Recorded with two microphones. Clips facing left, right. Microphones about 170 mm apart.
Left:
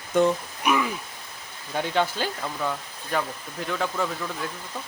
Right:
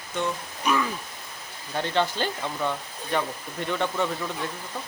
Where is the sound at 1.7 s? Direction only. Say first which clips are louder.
Even; 10° left (ahead or behind).